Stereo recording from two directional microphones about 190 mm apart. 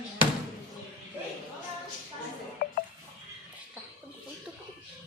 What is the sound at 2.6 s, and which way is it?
Music, 50° left (ahead or behind).